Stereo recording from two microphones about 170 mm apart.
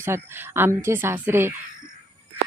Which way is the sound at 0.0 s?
15° right (ahead or behind).